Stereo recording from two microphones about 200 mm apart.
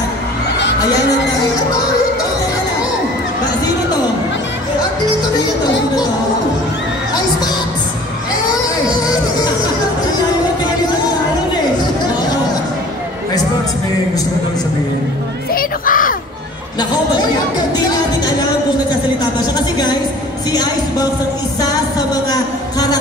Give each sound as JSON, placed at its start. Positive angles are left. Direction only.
{"t": 15.5, "sound": "music", "side_deg": 45}
{"t": 21.5, "sound": "a woman's voice", "side_deg": 20}